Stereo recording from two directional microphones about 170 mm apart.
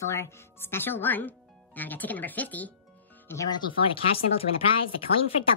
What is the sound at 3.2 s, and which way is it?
Speech, 20° left (ahead or behind).